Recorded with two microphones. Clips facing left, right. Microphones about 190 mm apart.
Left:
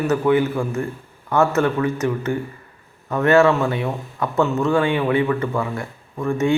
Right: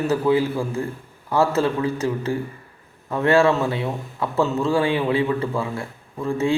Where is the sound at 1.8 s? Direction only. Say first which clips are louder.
Left 2 dB; 30° right (ahead or behind).